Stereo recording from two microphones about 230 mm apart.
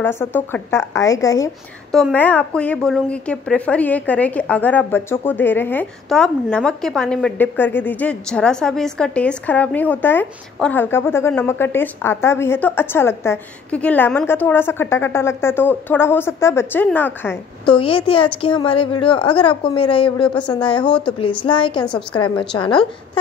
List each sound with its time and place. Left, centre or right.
0.0 s a woman's voice: centre
1.9 s a woman's voice: centre
17.7 s a woman's voice: left
20.2 s speech: centre
20.5 s a woman's voice: left
20.8 s speech: centre
21.5 s a woman's voice: left